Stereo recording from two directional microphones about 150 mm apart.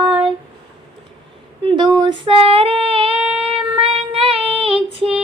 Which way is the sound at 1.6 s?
30° right (ahead or behind).